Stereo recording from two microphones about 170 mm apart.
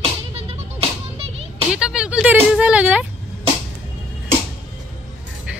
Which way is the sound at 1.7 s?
5° right (ahead or behind).